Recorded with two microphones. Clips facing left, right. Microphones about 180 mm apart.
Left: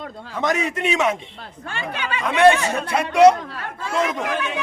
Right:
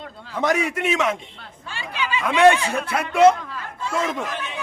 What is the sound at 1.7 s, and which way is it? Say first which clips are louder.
Speech: even; 55° left (ahead or behind).